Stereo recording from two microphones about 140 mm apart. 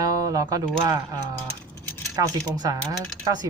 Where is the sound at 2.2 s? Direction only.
25° right (ahead or behind).